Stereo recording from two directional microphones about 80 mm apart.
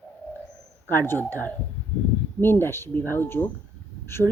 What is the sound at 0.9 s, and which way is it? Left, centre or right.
Speech, left.